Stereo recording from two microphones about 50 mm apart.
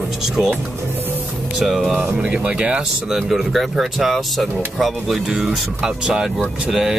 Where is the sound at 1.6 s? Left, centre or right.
Centre.